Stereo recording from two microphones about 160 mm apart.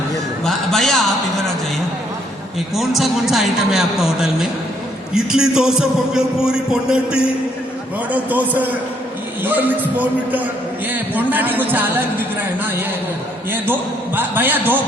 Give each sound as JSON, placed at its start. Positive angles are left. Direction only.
{"t": 0.4, "sound": "a man's voice", "side_deg": 0}
{"t": 2.7, "sound": "a man's voice", "side_deg": 0}
{"t": 14.2, "sound": "speech", "side_deg": -10}